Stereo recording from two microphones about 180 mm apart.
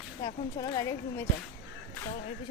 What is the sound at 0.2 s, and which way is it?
A woman's voice, 25° left (ahead or behind).